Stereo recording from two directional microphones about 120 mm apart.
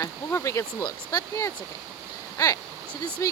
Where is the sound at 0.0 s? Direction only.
25° left (ahead or behind).